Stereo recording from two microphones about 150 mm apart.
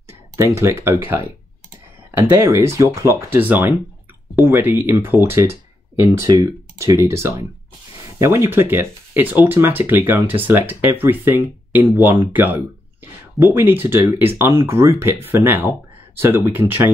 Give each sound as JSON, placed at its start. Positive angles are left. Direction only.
{"t": 0.4, "sound": "speech", "side_deg": -15}